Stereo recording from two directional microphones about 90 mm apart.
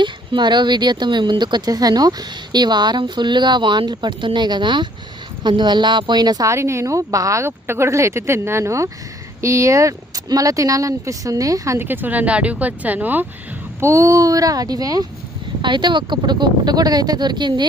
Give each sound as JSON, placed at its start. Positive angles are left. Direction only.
{"t": 0.0, "sound": "speech", "side_deg": -60}
{"t": 6.5, "sound": "speech", "side_deg": -30}
{"t": 11.9, "sound": "speech", "side_deg": -20}
{"t": 13.7, "sound": "speech", "side_deg": -35}
{"t": 15.6, "sound": "speech", "side_deg": -60}